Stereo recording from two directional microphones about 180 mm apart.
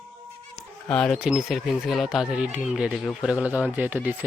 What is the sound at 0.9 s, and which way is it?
Speech, 5° left (ahead or behind).